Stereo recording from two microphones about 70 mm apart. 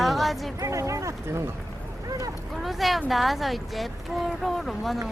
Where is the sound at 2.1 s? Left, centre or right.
Right.